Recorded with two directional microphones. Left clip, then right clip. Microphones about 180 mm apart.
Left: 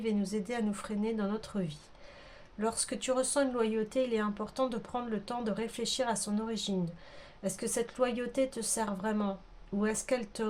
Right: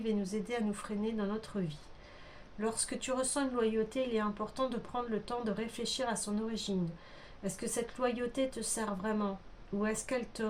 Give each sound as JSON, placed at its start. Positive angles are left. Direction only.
{"t": 0.2, "sound": "speech", "side_deg": 35}